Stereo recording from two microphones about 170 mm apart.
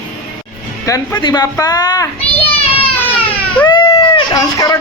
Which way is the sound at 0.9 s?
20° left (ahead or behind).